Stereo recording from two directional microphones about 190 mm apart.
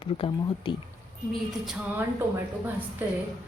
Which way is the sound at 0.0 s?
25° left (ahead or behind).